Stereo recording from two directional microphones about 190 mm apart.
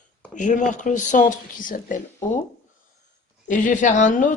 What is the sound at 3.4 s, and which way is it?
Speech, 40° left (ahead or behind).